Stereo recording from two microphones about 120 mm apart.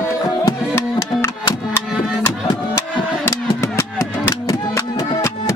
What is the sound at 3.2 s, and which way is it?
Music, 20° left (ahead or behind).